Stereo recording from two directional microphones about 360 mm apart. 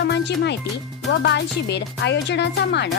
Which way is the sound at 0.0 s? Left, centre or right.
Left.